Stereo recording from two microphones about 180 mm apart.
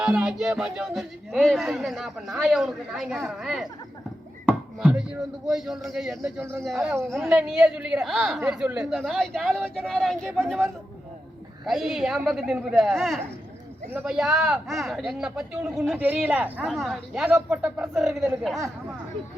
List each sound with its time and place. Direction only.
0.0 s speech: 5° right (ahead or behind)
4.8 s speech: 5° right (ahead or behind)
6.2 s speech: 15° right (ahead or behind)
6.7 s speech: centre (ahead or behind)